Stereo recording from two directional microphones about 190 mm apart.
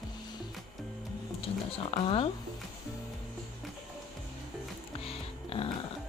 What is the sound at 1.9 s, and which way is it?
Speech, 30° left (ahead or behind).